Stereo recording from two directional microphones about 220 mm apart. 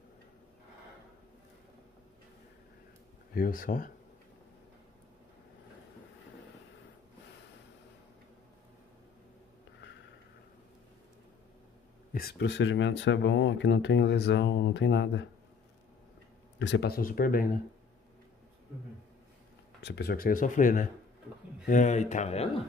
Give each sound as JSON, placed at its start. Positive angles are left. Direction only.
{"t": 3.3, "sound": "speech", "side_deg": 40}
{"t": 12.1, "sound": "speech", "side_deg": 45}
{"t": 16.5, "sound": "speech", "side_deg": 55}
{"t": 19.8, "sound": "speech", "side_deg": 50}